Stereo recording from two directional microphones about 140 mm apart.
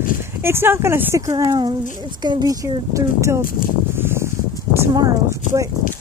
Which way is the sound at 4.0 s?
15° right (ahead or behind).